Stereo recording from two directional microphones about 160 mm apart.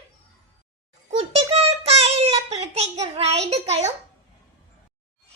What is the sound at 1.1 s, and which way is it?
Child singing, 40° right (ahead or behind).